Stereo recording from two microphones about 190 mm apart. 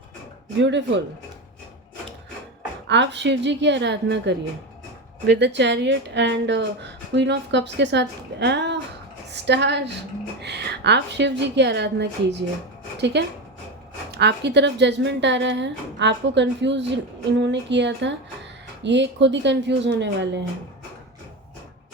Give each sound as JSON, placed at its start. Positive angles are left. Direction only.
{"t": 0.6, "sound": "a woman's voice", "side_deg": -70}
{"t": 2.8, "sound": "a woman's voice", "side_deg": -65}